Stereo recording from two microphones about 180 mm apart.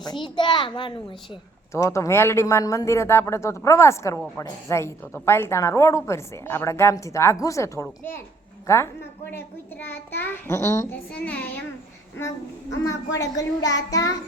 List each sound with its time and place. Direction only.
0.0 s speech: 25° left (ahead or behind)
1.7 s a woman's voice: 15° left (ahead or behind)
12.8 s speech: 20° left (ahead or behind)